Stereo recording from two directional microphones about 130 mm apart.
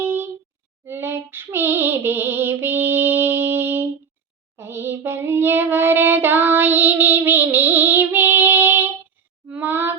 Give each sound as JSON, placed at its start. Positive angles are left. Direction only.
{"t": 0.0, "sound": "a sound", "side_deg": -15}
{"t": 0.9, "sound": "music", "side_deg": -20}
{"t": 4.5, "sound": "child singing", "side_deg": -20}